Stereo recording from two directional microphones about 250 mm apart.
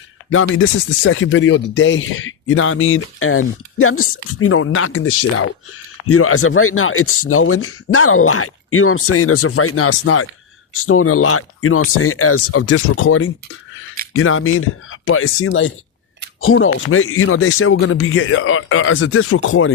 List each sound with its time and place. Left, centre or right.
0.3 s speech: left